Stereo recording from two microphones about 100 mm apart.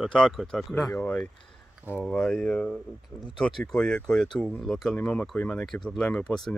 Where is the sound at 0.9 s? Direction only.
15° left (ahead or behind).